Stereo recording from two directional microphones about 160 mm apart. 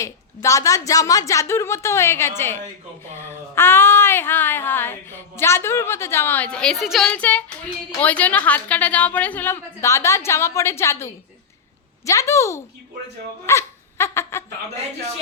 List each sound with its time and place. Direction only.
0.0 s a woman's voice: 20° left (ahead or behind)
13.5 s dog: 15° left (ahead or behind)